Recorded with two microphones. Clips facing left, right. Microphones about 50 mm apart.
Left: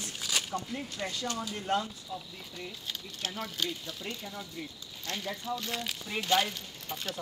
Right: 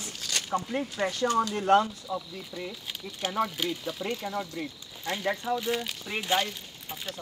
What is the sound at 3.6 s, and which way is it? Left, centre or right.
Speech, centre.